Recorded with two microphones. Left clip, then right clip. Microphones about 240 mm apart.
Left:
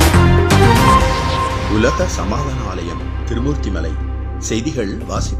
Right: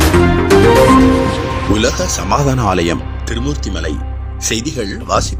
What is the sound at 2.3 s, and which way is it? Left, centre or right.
Speech, right.